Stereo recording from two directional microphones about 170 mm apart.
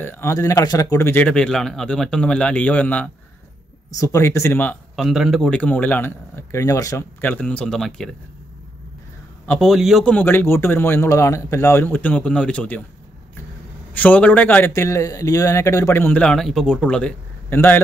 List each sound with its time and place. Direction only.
0.0 s a man's voice: 15° left (ahead or behind)
3.9 s a man's voice: 20° left (ahead or behind)
4.9 s a man's voice: centre (ahead or behind)
9.5 s a man's voice: centre (ahead or behind)
13.9 s a man's voice: 10° left (ahead or behind)